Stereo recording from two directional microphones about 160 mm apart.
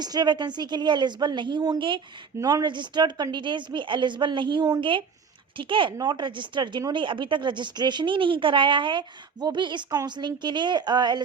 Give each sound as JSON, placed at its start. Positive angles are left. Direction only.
{"t": 0.0, "sound": "speech", "side_deg": -25}